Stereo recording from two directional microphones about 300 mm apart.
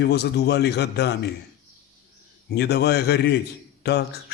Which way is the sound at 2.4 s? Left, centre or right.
Left.